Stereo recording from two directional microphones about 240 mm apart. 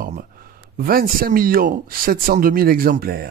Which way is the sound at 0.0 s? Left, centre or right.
Right.